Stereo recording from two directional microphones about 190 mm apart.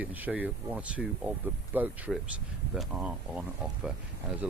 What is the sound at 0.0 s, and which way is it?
Speech, 10° right (ahead or behind).